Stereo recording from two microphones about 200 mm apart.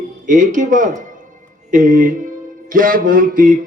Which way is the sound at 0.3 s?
40° right (ahead or behind).